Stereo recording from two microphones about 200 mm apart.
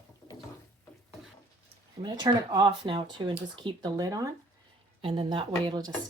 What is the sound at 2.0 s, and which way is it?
Speech, 20° right (ahead or behind).